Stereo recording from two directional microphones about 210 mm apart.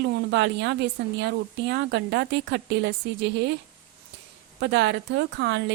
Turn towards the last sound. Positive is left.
turn(degrees=-55)  # may be behind; listen again after turning